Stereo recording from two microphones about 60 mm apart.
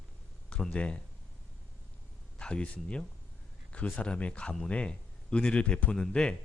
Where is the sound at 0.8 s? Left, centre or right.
Left.